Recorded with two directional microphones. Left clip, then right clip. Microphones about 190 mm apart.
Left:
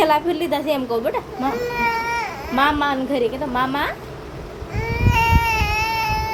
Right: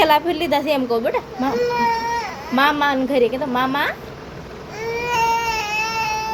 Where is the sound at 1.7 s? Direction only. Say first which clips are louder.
Right 1 dB; 15° left (ahead or behind).